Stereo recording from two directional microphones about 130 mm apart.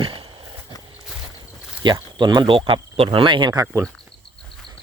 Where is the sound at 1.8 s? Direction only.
35° right (ahead or behind).